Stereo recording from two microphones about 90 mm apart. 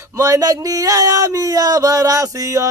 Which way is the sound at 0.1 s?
40° right (ahead or behind).